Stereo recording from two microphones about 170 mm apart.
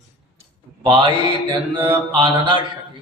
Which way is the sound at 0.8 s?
30° right (ahead or behind).